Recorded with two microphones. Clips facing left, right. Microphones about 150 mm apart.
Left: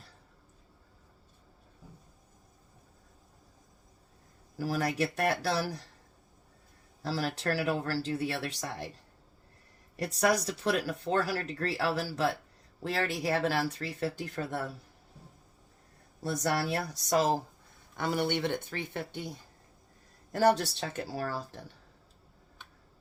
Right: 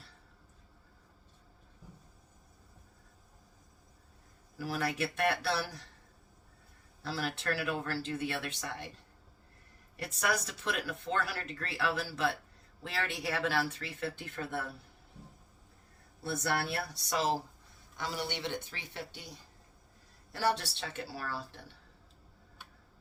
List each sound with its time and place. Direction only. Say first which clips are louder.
4.5 s speech: left 4 dB; 40° left (ahead or behind)
7.0 s speech: left 4 dB; 40° left (ahead or behind)
10.0 s speech: left 6 dB; 35° left (ahead or behind)
16.2 s speech: left 3 dB; 40° left (ahead or behind)
17.9 s speech: left 8 dB; 55° left (ahead or behind)
20.3 s speech: left 7 dB; 45° left (ahead or behind)